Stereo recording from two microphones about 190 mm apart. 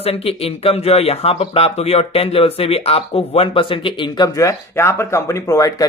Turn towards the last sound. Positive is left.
turn(degrees=15)  # may be behind; listen again after turning